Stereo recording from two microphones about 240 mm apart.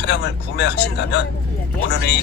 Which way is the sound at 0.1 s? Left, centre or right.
Left.